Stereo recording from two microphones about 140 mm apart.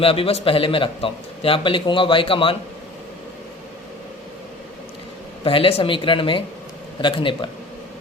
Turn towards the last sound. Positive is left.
turn(degrees=35)  # may be behind; listen again after turning